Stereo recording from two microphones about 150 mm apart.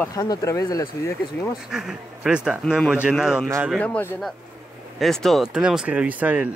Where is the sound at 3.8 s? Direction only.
10° left (ahead or behind).